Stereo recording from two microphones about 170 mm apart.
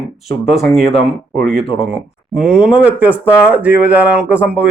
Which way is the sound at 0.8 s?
35° left (ahead or behind).